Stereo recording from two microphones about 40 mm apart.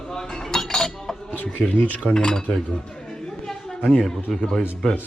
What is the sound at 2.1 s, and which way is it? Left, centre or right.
Speech, centre.